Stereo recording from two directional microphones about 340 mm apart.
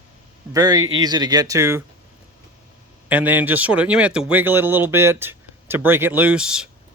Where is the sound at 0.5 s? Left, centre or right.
Centre.